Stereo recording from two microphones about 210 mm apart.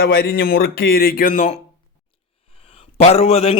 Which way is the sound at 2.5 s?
25° left (ahead or behind).